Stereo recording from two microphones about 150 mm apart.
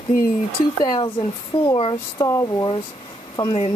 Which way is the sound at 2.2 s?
20° left (ahead or behind).